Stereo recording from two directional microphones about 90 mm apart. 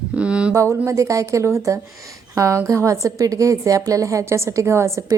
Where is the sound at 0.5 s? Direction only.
35° right (ahead or behind).